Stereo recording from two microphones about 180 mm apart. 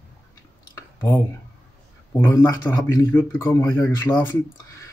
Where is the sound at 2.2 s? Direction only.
15° left (ahead or behind).